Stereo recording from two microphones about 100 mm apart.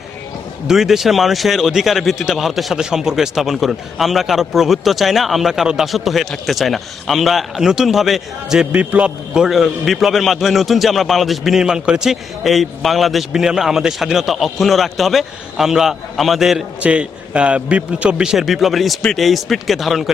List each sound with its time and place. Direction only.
0.7 s a man's voice: 5° right (ahead or behind)